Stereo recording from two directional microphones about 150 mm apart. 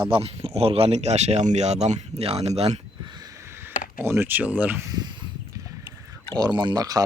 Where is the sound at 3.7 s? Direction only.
65° left (ahead or behind).